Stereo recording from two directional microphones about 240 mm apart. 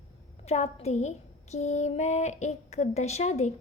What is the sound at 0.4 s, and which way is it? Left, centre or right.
A woman's voice, left.